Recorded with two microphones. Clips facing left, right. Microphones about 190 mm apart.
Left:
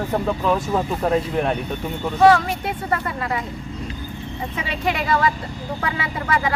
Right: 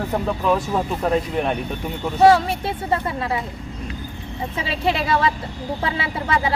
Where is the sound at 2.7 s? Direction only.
25° right (ahead or behind).